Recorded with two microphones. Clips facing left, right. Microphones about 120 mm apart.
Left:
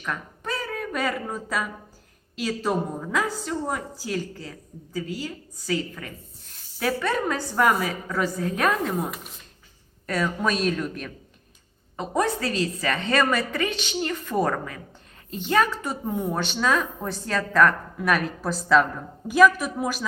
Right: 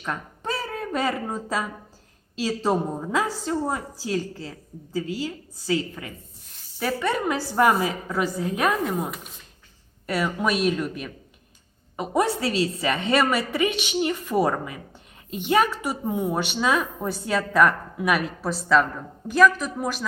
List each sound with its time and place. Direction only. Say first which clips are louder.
0.0 s speech: right 1 dB; 25° right (ahead or behind)
2.9 s a woman's voice: right 1 dB; 25° right (ahead or behind)
6.7 s speech: even; 5° right (ahead or behind)
7.5 s speech: right 2 dB; 25° right (ahead or behind); by 9.2 s centre (ahead or behind)
10.1 s speech: right 1 dB; 10° right (ahead or behind)